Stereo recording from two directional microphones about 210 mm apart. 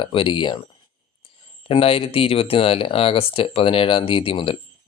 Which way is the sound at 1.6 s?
25° left (ahead or behind).